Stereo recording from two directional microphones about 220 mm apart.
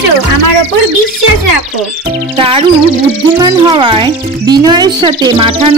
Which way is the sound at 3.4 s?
20° right (ahead or behind).